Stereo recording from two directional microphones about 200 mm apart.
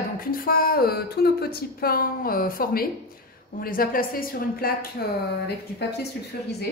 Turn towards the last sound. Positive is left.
turn(degrees=55)  # may be behind; listen again after turning